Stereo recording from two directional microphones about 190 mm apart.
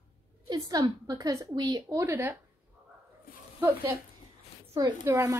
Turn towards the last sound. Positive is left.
turn(degrees=-15)  # may be behind; listen again after turning